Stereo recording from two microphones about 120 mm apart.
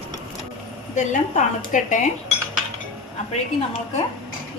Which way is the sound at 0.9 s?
90° left.